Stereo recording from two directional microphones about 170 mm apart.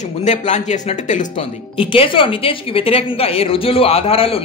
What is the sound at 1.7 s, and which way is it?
A woman's voice, 30° left (ahead or behind).